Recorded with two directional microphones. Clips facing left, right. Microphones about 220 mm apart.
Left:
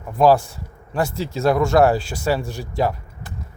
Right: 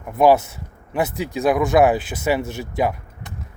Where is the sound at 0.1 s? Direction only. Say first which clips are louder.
Even; 20° right (ahead or behind).